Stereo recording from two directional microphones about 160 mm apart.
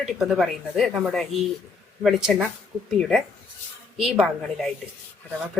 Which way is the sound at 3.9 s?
5° right (ahead or behind).